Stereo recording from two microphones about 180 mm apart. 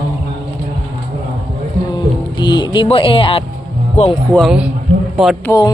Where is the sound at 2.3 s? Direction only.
25° left (ahead or behind).